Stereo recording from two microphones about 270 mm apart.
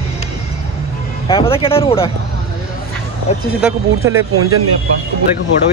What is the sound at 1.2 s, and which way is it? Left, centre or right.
Speech, centre.